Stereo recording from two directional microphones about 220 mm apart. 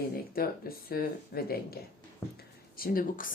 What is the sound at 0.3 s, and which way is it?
Speech, 45° left (ahead or behind).